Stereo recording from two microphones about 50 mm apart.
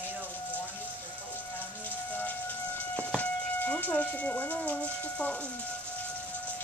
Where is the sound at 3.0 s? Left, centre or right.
Left.